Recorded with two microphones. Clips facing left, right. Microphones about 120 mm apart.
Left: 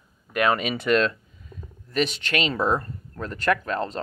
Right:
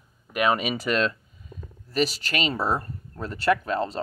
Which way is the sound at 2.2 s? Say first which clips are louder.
Left 2 dB; 5° right (ahead or behind).